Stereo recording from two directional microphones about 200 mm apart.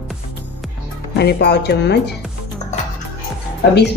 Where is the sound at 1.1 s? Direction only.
55° left (ahead or behind).